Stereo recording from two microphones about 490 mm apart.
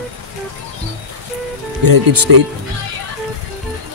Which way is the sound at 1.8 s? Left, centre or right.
Right.